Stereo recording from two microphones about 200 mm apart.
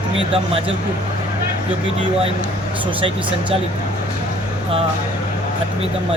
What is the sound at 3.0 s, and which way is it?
Speech, 25° right (ahead or behind).